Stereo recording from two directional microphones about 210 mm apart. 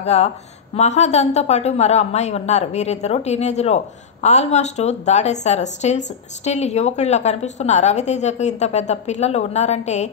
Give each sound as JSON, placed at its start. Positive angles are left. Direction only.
{"t": 0.0, "sound": "a woman's voice", "side_deg": 30}